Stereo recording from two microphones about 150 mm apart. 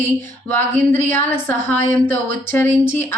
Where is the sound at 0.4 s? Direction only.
15° left (ahead or behind).